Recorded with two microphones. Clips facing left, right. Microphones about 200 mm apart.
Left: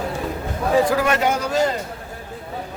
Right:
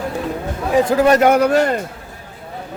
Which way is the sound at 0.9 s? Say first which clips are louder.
Right 6 dB; 35° right (ahead or behind).